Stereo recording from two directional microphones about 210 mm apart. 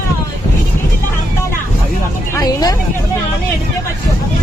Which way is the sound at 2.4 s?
20° left (ahead or behind).